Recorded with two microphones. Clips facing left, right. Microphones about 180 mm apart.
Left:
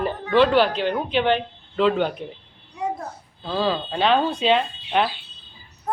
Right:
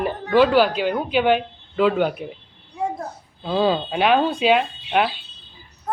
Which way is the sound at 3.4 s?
20° right (ahead or behind).